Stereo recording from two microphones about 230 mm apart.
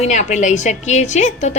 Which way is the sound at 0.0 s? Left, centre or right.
Left.